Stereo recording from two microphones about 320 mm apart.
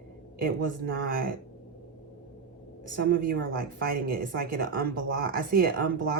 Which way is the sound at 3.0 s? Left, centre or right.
Right.